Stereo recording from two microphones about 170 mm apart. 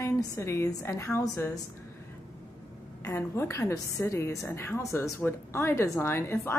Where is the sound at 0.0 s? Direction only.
15° left (ahead or behind).